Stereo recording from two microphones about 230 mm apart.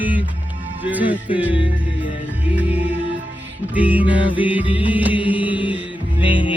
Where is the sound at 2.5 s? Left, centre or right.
Centre.